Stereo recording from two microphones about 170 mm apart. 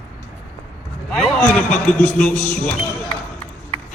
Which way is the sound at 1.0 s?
5° left (ahead or behind).